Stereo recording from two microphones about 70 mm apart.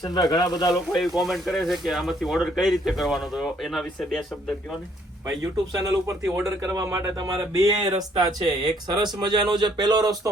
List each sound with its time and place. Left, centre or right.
0.0 s speech: left
0.9 s speech: centre
6.2 s speech: right
8.6 s speech: right